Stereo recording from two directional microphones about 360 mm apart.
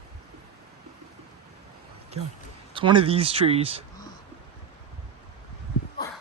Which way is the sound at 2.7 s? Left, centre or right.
Centre.